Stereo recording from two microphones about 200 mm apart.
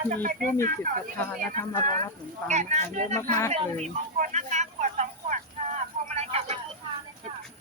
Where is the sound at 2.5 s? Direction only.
35° right (ahead or behind).